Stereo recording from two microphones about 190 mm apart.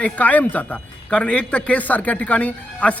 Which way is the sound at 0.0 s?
10° left (ahead or behind).